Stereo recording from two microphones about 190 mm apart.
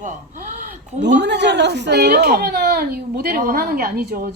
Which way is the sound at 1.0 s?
65° right (ahead or behind).